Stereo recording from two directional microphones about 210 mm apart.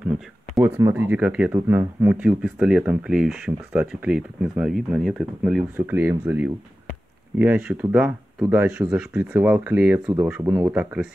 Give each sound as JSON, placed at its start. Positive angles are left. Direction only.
{"t": 0.6, "sound": "speech", "side_deg": -10}